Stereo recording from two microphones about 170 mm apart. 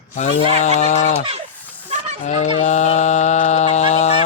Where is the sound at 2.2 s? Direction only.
40° left (ahead or behind).